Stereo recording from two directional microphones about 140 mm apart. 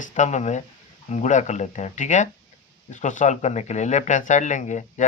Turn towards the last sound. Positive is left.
turn(degrees=60)  # may be behind; listen again after turning